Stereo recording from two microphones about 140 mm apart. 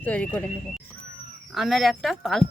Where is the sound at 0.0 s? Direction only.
10° left (ahead or behind).